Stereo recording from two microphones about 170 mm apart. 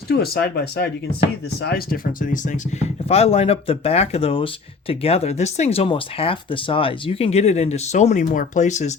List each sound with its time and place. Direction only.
0.1 s speech: 70° left (ahead or behind); by 8.9 s 45° left (ahead or behind)